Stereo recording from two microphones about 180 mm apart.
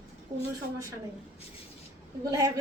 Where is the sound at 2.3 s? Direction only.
20° right (ahead or behind).